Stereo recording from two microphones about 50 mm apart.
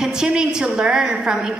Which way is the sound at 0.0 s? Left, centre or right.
Centre.